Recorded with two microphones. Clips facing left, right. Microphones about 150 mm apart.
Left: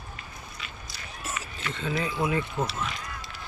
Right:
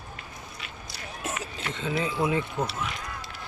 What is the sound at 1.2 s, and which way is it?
Run, 55° right (ahead or behind).